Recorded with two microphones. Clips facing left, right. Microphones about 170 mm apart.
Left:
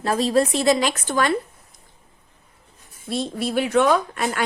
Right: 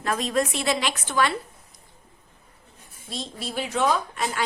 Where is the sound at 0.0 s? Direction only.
35° left (ahead or behind).